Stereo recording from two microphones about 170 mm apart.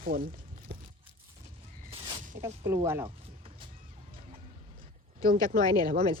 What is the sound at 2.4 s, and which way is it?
Speech, 15° right (ahead or behind).